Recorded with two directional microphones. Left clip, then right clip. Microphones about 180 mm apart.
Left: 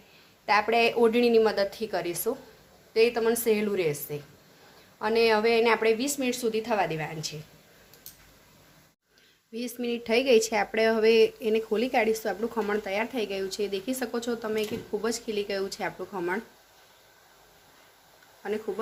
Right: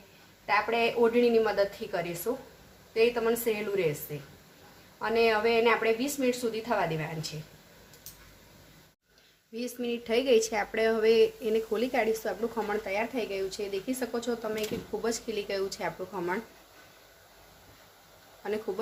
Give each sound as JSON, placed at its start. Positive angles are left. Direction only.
{"t": 0.4, "sound": "a woman's voice", "side_deg": 55}
{"t": 9.5, "sound": "speech", "side_deg": 25}
{"t": 18.4, "sound": "speech", "side_deg": 20}